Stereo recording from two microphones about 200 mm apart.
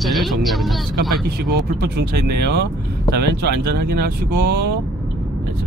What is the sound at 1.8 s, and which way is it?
Speech, 50° right (ahead or behind).